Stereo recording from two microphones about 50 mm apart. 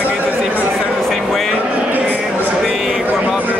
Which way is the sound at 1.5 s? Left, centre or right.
Right.